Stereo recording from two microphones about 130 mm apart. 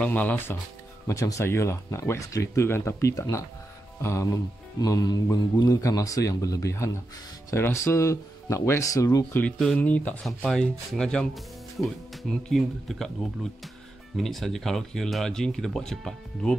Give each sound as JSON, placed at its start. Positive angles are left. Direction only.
{"t": 0.0, "sound": "speech", "side_deg": 10}
{"t": 1.0, "sound": "speech", "side_deg": 25}
{"t": 9.8, "sound": "speech", "side_deg": 10}